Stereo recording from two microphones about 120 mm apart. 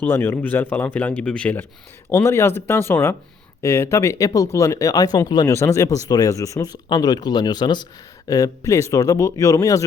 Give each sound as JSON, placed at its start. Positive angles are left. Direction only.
{"t": 0.0, "sound": "speech", "side_deg": 20}